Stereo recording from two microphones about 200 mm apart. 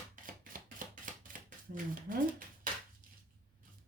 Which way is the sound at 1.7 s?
45° right (ahead or behind).